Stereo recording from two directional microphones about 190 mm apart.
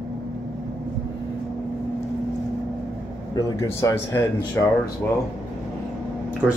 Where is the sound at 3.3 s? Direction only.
15° left (ahead or behind).